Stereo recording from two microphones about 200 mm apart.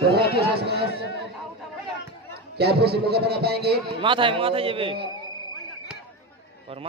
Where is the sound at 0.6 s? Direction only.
55° right (ahead or behind).